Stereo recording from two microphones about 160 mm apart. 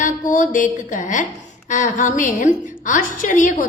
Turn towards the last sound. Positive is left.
turn(degrees=55)  # may be behind; listen again after turning